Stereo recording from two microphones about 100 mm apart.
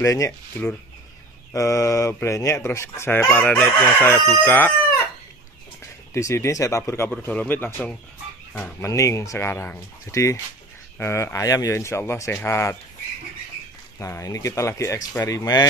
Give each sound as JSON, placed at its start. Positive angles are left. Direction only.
{"t": 0.0, "sound": "speech", "side_deg": 30}
{"t": 1.5, "sound": "speech", "side_deg": 30}
{"t": 6.1, "sound": "speech", "side_deg": 30}
{"t": 7.1, "sound": "speech", "side_deg": 15}
{"t": 8.7, "sound": "speech", "side_deg": 30}
{"t": 13.9, "sound": "speech", "side_deg": 30}